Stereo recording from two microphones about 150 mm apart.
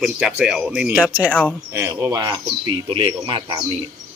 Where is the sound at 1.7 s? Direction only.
20° right (ahead or behind); by 3.6 s 35° right (ahead or behind).